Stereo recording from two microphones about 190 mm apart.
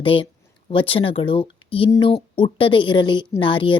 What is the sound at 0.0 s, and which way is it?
A woman's voice, 30° left (ahead or behind).